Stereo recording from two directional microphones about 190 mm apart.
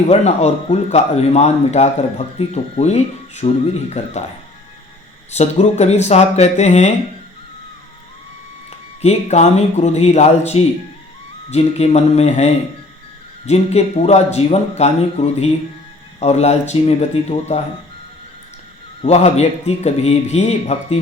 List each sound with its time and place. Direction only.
0.1 s speech: 35° left (ahead or behind)
5.3 s speech: 35° left (ahead or behind)
8.7 s speech: 35° left (ahead or behind)
19.0 s speech: 35° left (ahead or behind)